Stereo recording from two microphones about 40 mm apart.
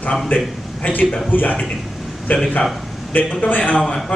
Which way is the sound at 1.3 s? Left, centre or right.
Left.